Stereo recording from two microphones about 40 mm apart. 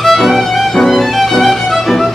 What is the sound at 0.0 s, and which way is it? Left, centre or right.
Music, centre.